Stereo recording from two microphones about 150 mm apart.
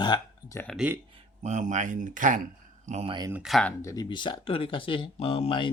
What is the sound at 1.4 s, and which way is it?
Speech, 55° right (ahead or behind).